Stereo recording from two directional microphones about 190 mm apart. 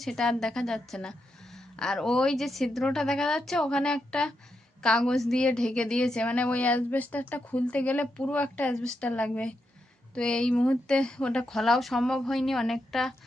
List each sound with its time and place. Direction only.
0.0 s a woman's voice: centre (ahead or behind)